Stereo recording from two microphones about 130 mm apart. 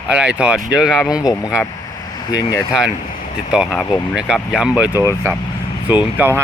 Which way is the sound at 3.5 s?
5° right (ahead or behind).